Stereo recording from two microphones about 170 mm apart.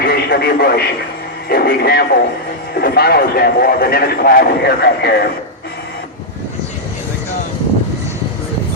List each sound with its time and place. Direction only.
0.0 s radio: 65° left (ahead or behind)
1.5 s a man's voice: 65° left (ahead or behind)